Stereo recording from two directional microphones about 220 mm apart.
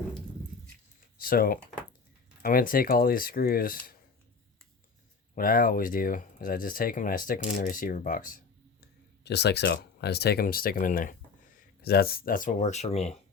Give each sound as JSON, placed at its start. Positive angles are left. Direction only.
{"t": 1.2, "sound": "speech", "side_deg": 40}
{"t": 5.3, "sound": "speech", "side_deg": 40}